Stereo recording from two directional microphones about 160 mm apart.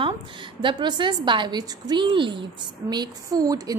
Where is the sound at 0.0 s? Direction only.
30° right (ahead or behind).